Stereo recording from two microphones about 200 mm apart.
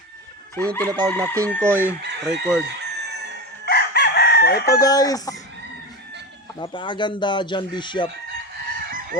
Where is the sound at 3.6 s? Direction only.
55° left (ahead or behind).